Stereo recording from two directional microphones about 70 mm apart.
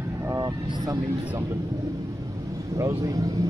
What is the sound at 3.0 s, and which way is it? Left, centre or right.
Speech, right.